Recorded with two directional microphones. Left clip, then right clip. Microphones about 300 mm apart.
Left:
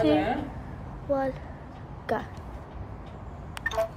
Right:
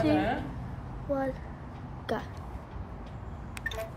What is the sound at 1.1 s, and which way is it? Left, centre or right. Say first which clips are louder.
Speech: left 4 dB; centre.